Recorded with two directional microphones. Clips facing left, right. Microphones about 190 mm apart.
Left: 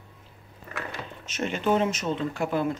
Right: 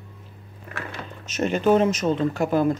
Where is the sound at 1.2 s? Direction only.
40° right (ahead or behind).